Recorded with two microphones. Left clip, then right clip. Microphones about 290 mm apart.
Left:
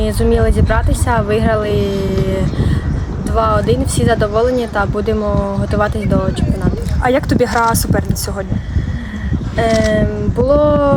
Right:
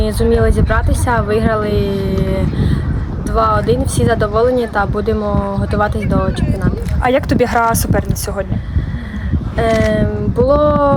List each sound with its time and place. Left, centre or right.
0.0 s speech: centre
7.0 s speech: right
9.6 s speech: centre